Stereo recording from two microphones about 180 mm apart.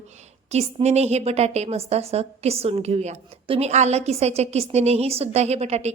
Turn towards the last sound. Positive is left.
turn(degrees=-35)  # may be behind; listen again after turning